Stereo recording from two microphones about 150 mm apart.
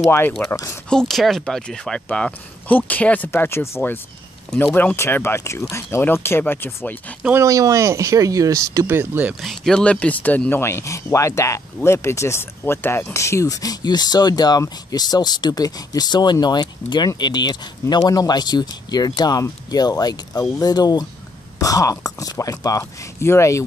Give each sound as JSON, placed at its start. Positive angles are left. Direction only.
{"t": 0.4, "sound": "speech", "side_deg": 10}
{"t": 7.2, "sound": "speech", "side_deg": -20}
{"t": 9.4, "sound": "speech", "side_deg": 5}